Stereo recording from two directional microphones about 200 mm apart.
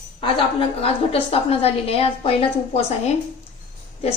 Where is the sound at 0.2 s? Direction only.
25° left (ahead or behind).